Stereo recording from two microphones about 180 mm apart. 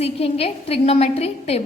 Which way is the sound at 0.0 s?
35° left (ahead or behind).